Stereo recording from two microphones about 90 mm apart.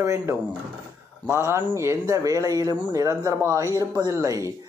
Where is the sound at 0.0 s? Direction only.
30° right (ahead or behind).